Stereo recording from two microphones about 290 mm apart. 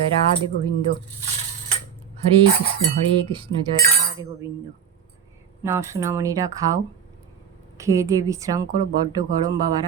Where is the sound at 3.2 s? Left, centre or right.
Centre.